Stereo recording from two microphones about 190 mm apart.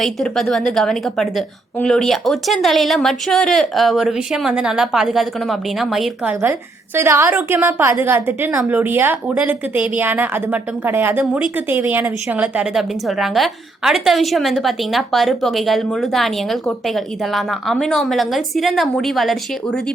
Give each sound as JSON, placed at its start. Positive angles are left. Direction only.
{"t": 0.0, "sound": "a woman's voice", "side_deg": 0}